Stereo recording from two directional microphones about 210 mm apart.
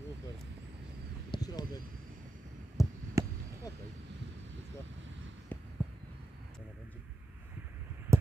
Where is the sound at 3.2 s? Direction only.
15° right (ahead or behind).